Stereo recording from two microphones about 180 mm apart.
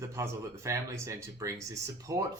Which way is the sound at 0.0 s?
15° right (ahead or behind).